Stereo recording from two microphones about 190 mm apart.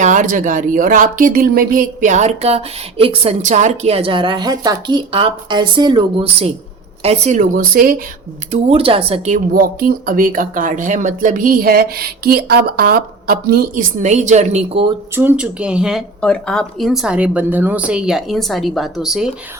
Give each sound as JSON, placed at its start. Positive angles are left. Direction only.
{"t": 0.0, "sound": "speech", "side_deg": -40}
{"t": 7.0, "sound": "speech", "side_deg": -35}
{"t": 8.4, "sound": "speech", "side_deg": -35}
{"t": 15.1, "sound": "speech", "side_deg": -10}